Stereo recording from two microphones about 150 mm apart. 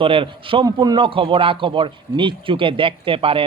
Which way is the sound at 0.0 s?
35° right (ahead or behind).